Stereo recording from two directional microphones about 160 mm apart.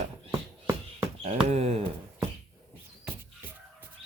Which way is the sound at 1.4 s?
40° right (ahead or behind).